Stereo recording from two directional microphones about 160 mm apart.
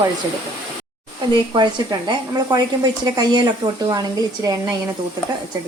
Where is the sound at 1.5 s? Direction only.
30° right (ahead or behind).